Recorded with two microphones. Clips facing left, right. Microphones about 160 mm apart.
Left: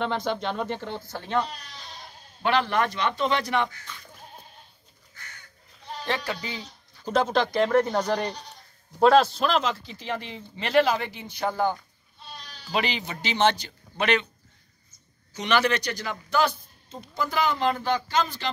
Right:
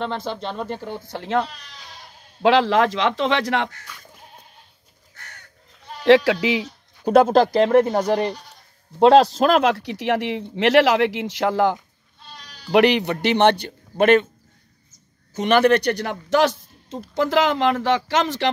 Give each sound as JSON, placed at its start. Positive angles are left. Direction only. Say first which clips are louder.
{"t": 0.3, "sound": "speech", "louder": "even", "side_deg": 0}
{"t": 1.0, "sound": "speech", "louder": "right 5 dB", "side_deg": -80}
{"t": 2.4, "sound": "speech", "louder": "right 7 dB", "side_deg": -90}
{"t": 5.1, "sound": "crow", "louder": "right 3 dB", "side_deg": -65}
{"t": 6.0, "sound": "speech", "louder": "right 16 dB", "side_deg": -90}
{"t": 7.3, "sound": "a man's voice", "louder": "right 7 dB", "side_deg": -35}
{"t": 9.0, "sound": "a man's voice", "louder": "right 5 dB", "side_deg": -35}
{"t": 9.5, "sound": "speech", "louder": "right 8 dB", "side_deg": -65}
{"t": 12.7, "sound": "speech", "louder": "right 12 dB", "side_deg": -70}
{"t": 15.3, "sound": "a man's voice", "louder": "right 8 dB", "side_deg": -50}